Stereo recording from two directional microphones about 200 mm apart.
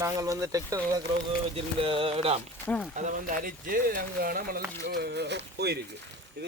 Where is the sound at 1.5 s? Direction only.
25° right (ahead or behind).